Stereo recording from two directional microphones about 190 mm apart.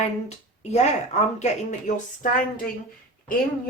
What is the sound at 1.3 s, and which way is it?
Speech, 40° left (ahead or behind).